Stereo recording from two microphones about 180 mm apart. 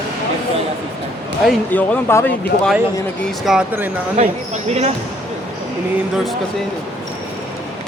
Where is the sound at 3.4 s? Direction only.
5° right (ahead or behind).